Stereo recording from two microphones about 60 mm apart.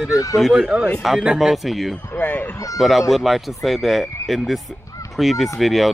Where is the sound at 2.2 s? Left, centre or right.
Left.